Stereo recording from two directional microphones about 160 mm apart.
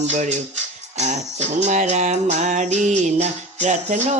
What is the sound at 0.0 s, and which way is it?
Speech, 45° right (ahead or behind).